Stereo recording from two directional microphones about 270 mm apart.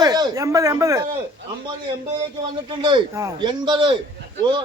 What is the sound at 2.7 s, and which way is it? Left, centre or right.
Speech, centre.